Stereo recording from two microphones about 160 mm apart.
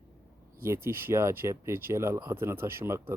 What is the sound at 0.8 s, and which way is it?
Speech, 15° right (ahead or behind).